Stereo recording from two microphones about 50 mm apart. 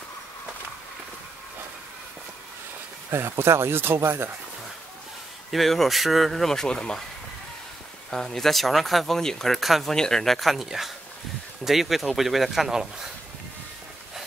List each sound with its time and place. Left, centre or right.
3.1 s speech: right
5.5 s speech: centre
8.1 s speech: centre
9.6 s speech: centre
9.9 s speech: centre